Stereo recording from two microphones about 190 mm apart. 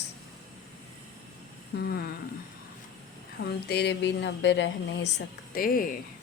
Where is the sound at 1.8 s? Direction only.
55° left (ahead or behind).